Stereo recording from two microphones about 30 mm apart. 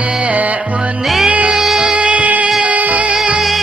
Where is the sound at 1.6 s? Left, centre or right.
Centre.